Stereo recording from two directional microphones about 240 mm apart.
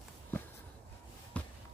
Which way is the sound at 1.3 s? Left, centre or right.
Centre.